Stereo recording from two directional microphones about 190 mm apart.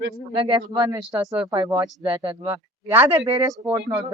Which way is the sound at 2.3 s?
10° right (ahead or behind).